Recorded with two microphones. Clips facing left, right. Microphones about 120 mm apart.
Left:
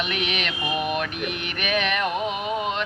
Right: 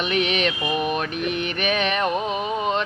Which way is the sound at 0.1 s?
35° right (ahead or behind).